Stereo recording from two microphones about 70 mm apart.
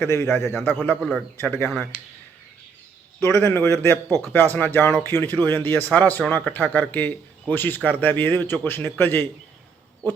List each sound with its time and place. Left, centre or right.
0.0 s a man's voice: left
3.2 s a man's voice: left